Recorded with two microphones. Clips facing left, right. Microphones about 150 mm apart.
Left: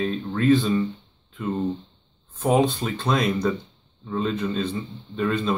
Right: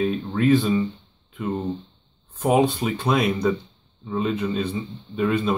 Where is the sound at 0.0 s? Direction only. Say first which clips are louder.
Right 2 dB; 5° right (ahead or behind).